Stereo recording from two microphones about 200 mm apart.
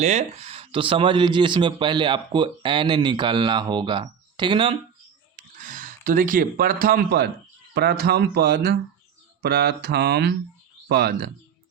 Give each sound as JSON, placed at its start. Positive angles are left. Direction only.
{"t": 0.0, "sound": "speech", "side_deg": -35}
{"t": 5.4, "sound": "speech", "side_deg": -40}